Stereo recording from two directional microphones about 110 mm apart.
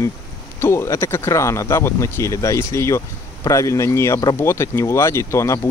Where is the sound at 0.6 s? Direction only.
25° left (ahead or behind).